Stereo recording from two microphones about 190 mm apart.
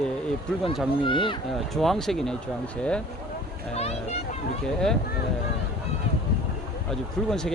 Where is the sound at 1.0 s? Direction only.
25° left (ahead or behind).